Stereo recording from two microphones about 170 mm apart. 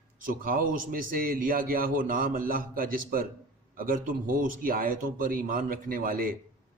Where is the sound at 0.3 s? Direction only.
55° right (ahead or behind).